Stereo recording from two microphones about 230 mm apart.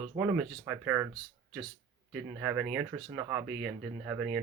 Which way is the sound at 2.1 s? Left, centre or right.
Centre.